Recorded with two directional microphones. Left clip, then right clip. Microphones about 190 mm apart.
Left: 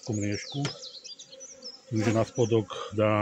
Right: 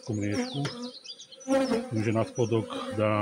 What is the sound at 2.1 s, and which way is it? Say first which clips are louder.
Speech: left 3 dB; 30° left (ahead or behind).